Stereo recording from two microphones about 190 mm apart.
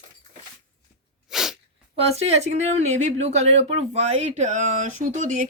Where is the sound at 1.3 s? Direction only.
Centre (ahead or behind).